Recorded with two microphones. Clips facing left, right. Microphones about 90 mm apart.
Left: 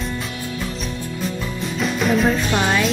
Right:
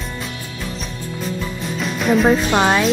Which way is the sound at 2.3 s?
40° right (ahead or behind).